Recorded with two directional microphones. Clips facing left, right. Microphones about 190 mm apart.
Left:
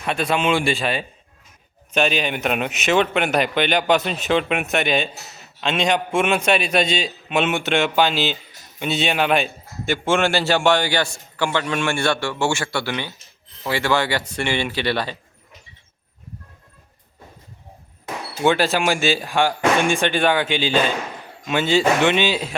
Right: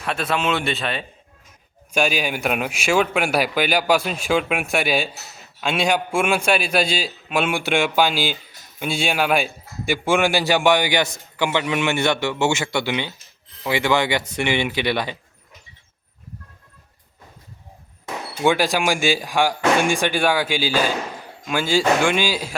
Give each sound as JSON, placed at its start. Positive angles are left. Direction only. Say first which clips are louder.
{"t": 0.0, "sound": "a man's voice", "louder": "left 2 dB", "side_deg": 5}
{"t": 1.9, "sound": "a man's voice", "louder": "left 1 dB", "side_deg": -10}
{"t": 18.4, "sound": "a man's voice", "louder": "left 1 dB", "side_deg": -10}